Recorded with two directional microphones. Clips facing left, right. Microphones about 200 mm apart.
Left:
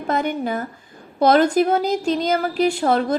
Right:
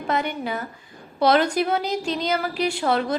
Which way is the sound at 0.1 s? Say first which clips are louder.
Left 4 dB; 45° left (ahead or behind).